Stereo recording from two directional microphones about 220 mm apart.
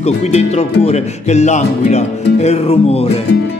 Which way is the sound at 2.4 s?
30° left (ahead or behind).